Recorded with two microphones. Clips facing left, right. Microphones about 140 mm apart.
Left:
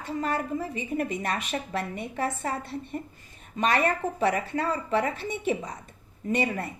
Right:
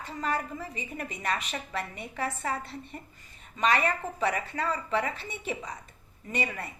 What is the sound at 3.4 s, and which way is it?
Speech, 50° left (ahead or behind).